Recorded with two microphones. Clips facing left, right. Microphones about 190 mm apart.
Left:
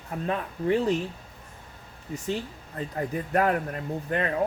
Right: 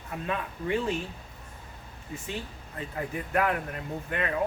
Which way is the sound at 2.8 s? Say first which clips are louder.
Left 4 dB; 40° left (ahead or behind).